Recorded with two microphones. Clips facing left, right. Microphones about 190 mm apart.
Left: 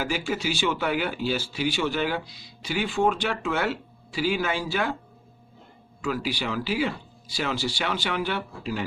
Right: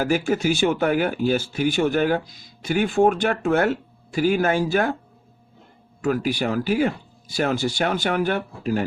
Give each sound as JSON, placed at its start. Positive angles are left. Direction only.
{"t": 0.0, "sound": "speech", "side_deg": -50}
{"t": 6.0, "sound": "speech", "side_deg": -50}